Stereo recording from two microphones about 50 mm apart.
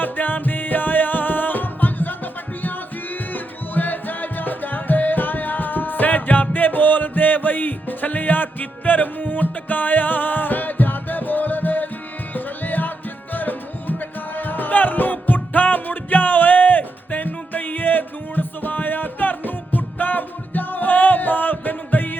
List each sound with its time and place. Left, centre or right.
0.0 s music: left